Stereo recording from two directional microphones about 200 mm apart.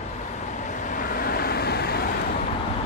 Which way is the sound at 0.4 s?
35° left (ahead or behind).